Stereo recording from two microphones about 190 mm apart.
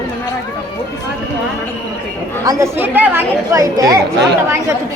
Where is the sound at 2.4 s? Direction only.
15° right (ahead or behind).